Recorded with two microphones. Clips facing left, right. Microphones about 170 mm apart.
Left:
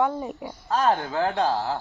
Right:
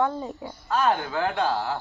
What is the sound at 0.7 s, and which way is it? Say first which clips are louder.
Speech: left 1 dB; 35° left (ahead or behind).